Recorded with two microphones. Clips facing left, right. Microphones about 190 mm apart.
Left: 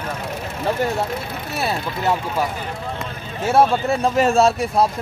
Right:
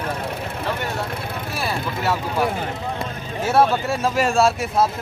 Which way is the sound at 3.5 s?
15° left (ahead or behind).